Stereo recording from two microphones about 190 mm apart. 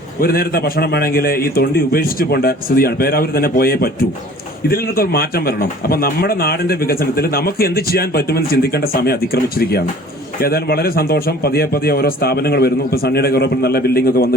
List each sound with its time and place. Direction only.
0.2 s a man's voice: 50° left (ahead or behind)